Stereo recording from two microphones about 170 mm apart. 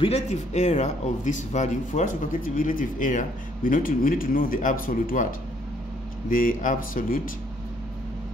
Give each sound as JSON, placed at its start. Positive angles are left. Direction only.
{"t": 0.0, "sound": "a man's voice", "side_deg": 40}
{"t": 6.3, "sound": "a man's voice", "side_deg": 50}